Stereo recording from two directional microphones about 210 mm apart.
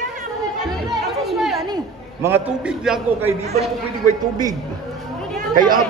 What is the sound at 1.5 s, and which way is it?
A man's voice, 15° right (ahead or behind).